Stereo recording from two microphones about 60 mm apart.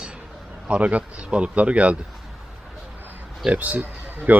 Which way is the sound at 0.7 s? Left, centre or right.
Right.